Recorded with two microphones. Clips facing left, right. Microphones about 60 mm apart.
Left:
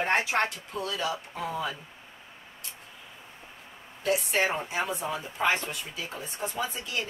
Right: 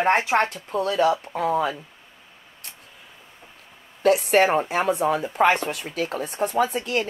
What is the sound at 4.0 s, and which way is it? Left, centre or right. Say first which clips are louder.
Speech: right 9 dB; right.